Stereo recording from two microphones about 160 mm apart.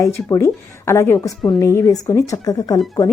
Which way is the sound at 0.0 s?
20° left (ahead or behind).